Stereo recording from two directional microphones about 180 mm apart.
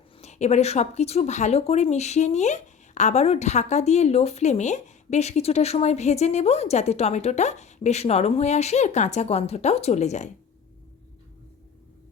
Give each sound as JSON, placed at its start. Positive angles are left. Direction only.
{"t": 0.2, "sound": "speech", "side_deg": 40}